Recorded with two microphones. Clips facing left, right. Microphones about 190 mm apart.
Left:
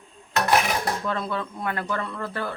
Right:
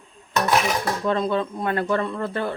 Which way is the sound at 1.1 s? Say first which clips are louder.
Right 6 dB; 25° right (ahead or behind).